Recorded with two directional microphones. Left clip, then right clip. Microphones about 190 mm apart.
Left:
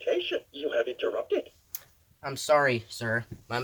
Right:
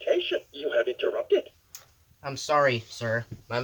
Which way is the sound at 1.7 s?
45° left (ahead or behind).